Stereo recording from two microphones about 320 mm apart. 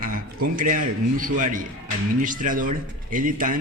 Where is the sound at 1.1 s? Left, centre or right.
Right.